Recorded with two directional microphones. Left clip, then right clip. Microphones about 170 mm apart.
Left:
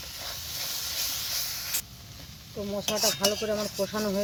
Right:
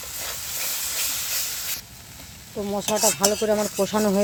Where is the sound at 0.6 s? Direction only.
25° right (ahead or behind).